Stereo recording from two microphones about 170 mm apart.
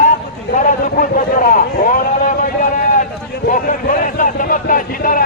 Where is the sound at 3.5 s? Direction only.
50° left (ahead or behind).